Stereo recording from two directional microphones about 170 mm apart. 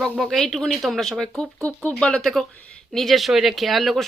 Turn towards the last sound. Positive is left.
turn(degrees=0)  # may be behind; listen again after turning